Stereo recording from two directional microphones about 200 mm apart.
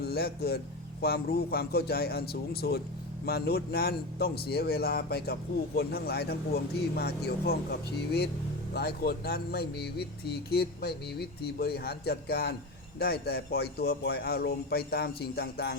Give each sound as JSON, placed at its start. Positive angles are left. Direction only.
{"t": 0.0, "sound": "a man's voice", "side_deg": 50}